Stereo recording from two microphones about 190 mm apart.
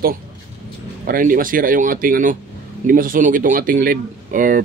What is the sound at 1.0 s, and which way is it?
Speech, 45° right (ahead or behind).